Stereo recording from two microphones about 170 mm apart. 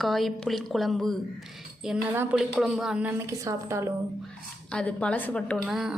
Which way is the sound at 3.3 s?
15° right (ahead or behind).